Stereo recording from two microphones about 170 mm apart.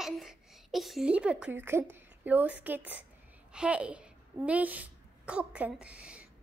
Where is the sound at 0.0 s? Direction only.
Centre (ahead or behind).